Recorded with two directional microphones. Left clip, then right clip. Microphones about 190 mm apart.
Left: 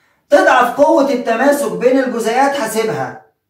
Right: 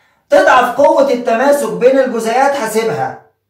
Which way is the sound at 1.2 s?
15° right (ahead or behind).